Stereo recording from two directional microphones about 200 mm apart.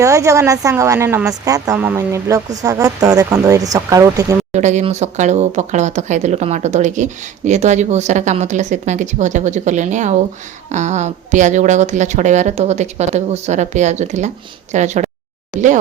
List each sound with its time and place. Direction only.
0.0 s speech: 15° right (ahead or behind)
4.5 s speech: 35° right (ahead or behind)